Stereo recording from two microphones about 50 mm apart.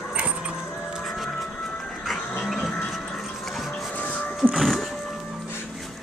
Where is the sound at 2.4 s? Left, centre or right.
Centre.